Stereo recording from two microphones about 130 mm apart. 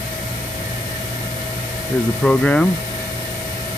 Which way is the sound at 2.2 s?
10° left (ahead or behind).